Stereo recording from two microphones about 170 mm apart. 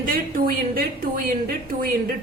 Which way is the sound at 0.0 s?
60° right (ahead or behind).